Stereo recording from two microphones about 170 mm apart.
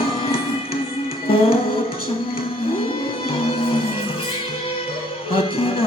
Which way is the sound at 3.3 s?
35° left (ahead or behind).